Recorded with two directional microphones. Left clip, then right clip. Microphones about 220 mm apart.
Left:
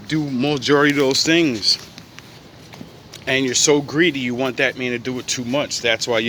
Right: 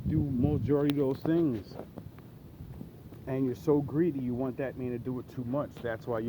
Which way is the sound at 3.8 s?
35° left (ahead or behind).